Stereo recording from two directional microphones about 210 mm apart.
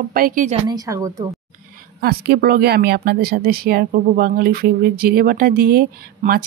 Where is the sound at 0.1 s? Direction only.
40° right (ahead or behind).